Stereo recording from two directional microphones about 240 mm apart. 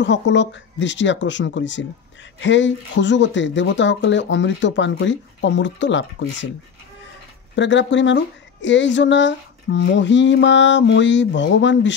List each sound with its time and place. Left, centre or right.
0.0 s speech: left
7.5 s speech: left